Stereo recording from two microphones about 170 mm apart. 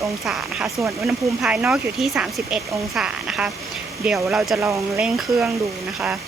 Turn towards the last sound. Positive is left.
turn(degrees=-5)  # may be behind; listen again after turning